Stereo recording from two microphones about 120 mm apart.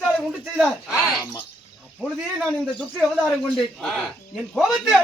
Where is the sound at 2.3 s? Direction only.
5° left (ahead or behind).